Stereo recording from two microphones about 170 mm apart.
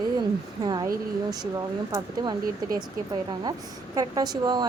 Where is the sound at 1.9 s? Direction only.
25° right (ahead or behind).